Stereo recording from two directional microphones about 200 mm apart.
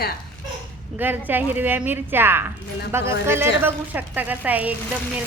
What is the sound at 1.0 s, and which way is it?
A woman's voice, 10° right (ahead or behind).